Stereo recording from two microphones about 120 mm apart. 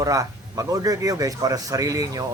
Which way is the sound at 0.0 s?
30° right (ahead or behind).